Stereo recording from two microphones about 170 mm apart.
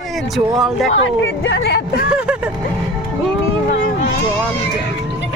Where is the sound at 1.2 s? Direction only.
90° left.